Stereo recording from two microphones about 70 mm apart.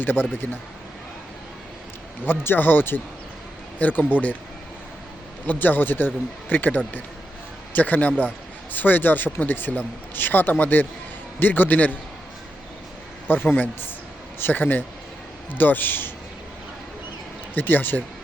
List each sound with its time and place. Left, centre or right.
0.0 s speech: left
2.2 s speech: left
5.5 s speech: left
13.2 s a man's voice: left
17.5 s speech: left